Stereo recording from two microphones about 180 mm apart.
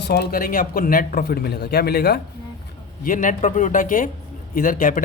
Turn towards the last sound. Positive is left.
turn(degrees=50)  # may be behind; listen again after turning